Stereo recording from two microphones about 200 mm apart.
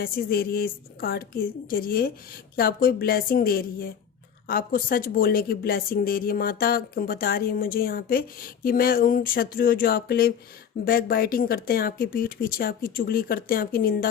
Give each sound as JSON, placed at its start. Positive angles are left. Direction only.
{"t": 0.0, "sound": "speech", "side_deg": 50}